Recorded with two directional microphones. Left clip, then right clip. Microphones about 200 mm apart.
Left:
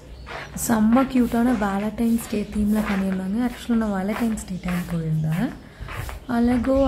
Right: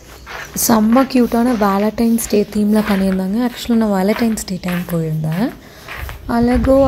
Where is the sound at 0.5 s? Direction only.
20° right (ahead or behind).